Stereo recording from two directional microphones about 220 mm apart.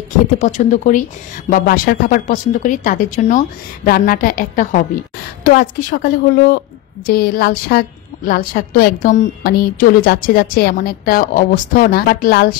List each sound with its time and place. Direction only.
0.4 s a woman's voice: 35° left (ahead or behind)